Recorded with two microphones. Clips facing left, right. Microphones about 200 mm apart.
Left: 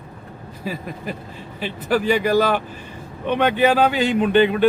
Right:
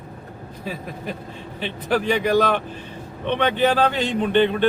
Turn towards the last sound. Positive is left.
turn(degrees=5)  # may be behind; listen again after turning